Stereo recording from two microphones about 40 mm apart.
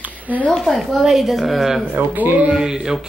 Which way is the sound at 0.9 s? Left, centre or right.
Centre.